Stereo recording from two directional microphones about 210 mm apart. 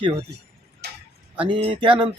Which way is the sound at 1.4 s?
25° right (ahead or behind).